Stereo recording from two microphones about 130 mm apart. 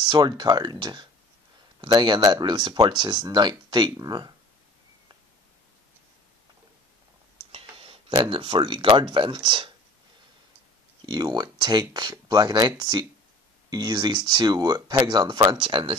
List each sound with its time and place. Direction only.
0.0 s speech: 35° right (ahead or behind)
7.5 s speech: 45° right (ahead or behind)
11.1 s speech: 30° right (ahead or behind)